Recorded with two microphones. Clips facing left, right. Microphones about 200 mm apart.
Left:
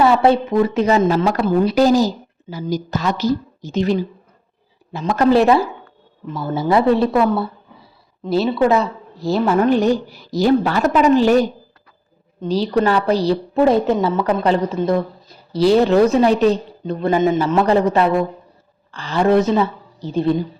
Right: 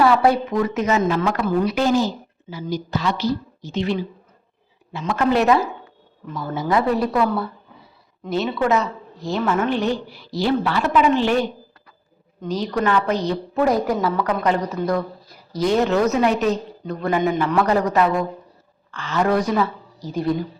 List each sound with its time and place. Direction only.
0.0 s a woman's voice: 25° left (ahead or behind)